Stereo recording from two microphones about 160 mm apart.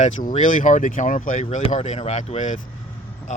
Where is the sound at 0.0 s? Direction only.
50° left (ahead or behind).